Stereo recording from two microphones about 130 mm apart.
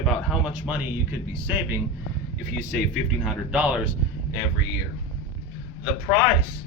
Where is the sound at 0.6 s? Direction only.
15° right (ahead or behind).